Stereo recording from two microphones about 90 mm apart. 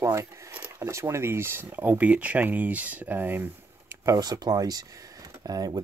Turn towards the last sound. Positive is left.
turn(degrees=-45)  # may be behind; listen again after turning